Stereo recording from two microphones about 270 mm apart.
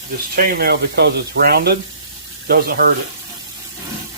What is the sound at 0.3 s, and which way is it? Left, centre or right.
Speech, right.